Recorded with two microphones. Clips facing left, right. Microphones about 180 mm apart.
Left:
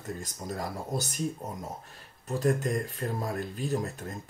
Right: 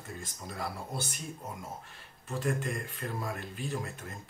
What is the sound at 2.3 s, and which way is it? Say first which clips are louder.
Speech: left 6 dB; 40° left (ahead or behind).